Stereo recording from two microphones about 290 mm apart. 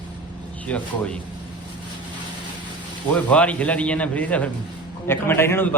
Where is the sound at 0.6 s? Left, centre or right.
Centre.